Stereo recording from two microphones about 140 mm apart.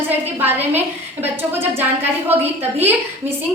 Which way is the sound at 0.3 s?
15° right (ahead or behind).